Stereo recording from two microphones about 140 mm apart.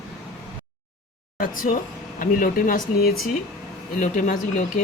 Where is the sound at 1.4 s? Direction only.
80° left.